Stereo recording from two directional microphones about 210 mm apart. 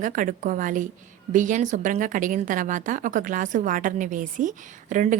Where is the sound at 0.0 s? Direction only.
40° right (ahead or behind).